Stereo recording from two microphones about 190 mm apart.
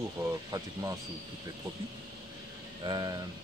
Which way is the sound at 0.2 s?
15° right (ahead or behind).